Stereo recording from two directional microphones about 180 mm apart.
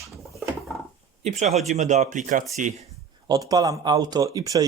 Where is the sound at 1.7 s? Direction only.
40° right (ahead or behind).